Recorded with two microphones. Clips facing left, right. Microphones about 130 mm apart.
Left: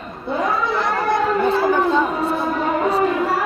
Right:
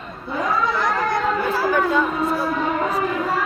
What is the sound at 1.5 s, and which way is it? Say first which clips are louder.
Chatter: left 4 dB; 25° left (ahead or behind).